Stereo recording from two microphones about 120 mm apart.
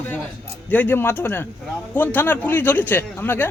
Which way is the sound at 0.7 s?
15° left (ahead or behind).